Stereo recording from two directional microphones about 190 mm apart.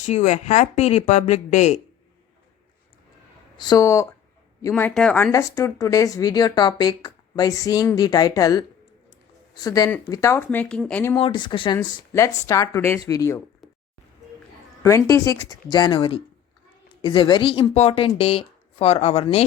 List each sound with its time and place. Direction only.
0.0 s speech: 35° left (ahead or behind)
3.6 s speech: 20° left (ahead or behind)
4.7 s speech: 5° left (ahead or behind)
11.2 s speech: 25° left (ahead or behind)
14.8 s speech: 15° left (ahead or behind); by 19.5 s 30° left (ahead or behind)